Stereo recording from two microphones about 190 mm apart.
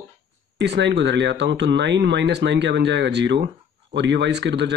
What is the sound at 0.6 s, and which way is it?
Speech, 65° right (ahead or behind).